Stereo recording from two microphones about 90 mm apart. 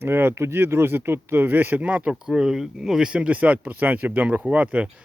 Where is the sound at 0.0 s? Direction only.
25° right (ahead or behind).